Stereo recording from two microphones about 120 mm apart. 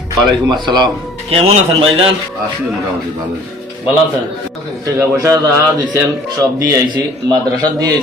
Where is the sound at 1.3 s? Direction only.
50° right (ahead or behind).